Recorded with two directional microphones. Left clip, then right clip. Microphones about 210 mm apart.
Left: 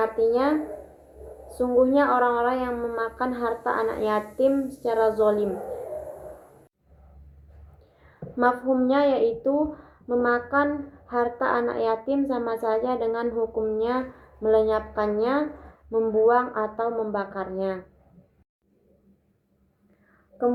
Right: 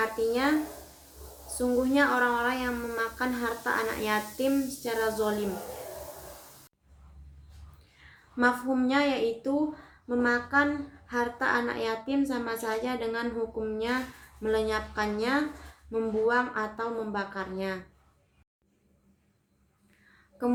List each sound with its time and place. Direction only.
0.0 s a woman's voice: 30° right (ahead or behind)
1.5 s a woman's voice: 30° right (ahead or behind)
8.4 s a woman's voice: 30° right (ahead or behind)